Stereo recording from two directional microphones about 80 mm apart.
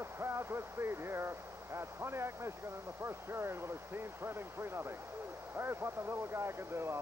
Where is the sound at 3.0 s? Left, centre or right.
Right.